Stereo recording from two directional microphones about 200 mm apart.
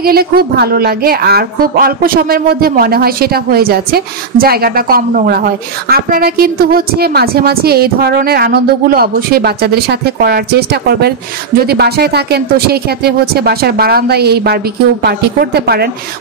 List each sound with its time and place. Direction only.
0.0 s a woman's voice: 50° right (ahead or behind)